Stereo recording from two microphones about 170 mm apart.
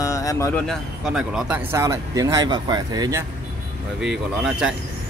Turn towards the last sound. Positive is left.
turn(degrees=-5)  # may be behind; listen again after turning